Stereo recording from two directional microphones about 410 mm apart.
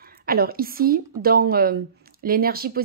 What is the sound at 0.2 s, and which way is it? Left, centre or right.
Speech, right.